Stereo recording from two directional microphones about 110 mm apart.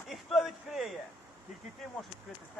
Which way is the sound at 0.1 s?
Centre (ahead or behind).